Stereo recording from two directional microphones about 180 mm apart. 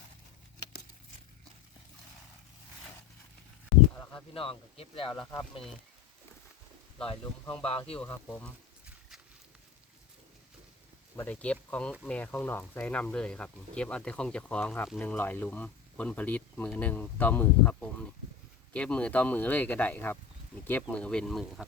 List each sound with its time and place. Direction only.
4.1 s speech: 30° left (ahead or behind)
5.2 s speech: 5° left (ahead or behind)
7.4 s speech: 5° left (ahead or behind)
7.7 s speech: 30° left (ahead or behind)
7.9 s speech: 10° left (ahead or behind)
11.2 s speech: 10° left (ahead or behind)